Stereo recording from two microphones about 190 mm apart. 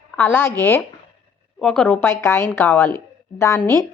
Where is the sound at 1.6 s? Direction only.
5° left (ahead or behind).